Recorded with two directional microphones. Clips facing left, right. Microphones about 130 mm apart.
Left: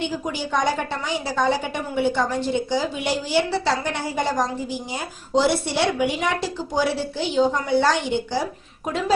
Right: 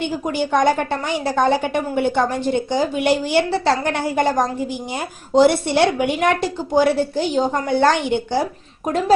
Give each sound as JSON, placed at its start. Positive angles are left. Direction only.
{"t": 0.3, "sound": "a woman's voice", "side_deg": -55}